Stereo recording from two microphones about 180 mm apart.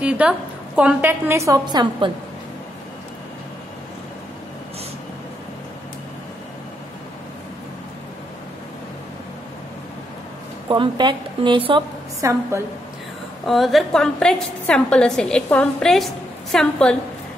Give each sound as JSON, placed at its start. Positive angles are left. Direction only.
{"t": 0.2, "sound": "a woman's voice", "side_deg": -5}
{"t": 10.7, "sound": "a woman's voice", "side_deg": -25}
{"t": 12.2, "sound": "a woman's voice", "side_deg": -15}
{"t": 13.5, "sound": "a woman's voice", "side_deg": 0}